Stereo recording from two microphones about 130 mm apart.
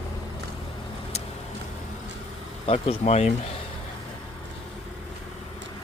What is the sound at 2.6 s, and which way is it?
Speech, 50° left (ahead or behind).